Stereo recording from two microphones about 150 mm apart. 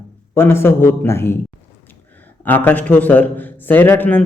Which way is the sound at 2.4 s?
10° left (ahead or behind).